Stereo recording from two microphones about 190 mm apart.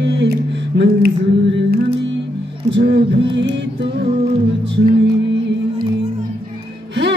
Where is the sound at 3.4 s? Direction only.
70° right (ahead or behind).